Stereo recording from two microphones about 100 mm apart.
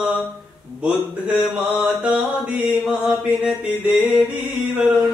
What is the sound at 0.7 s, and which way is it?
Mantra, 10° right (ahead or behind).